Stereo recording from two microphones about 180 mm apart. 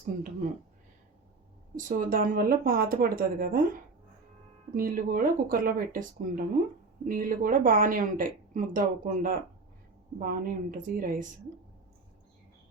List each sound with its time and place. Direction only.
0.0 s speech: 45° right (ahead or behind)
1.7 s speech: 50° right (ahead or behind)
4.7 s speech: 50° right (ahead or behind)